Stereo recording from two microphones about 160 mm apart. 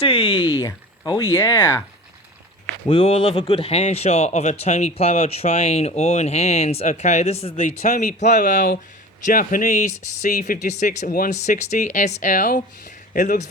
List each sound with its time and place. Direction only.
0.0 s speech: 35° left (ahead or behind)
0.5 s speech: 20° left (ahead or behind)
2.8 s speech: 40° left (ahead or behind)
7.9 s speech: 55° left (ahead or behind)
8.2 s speech: 45° left (ahead or behind)
8.5 s speech: 60° left (ahead or behind)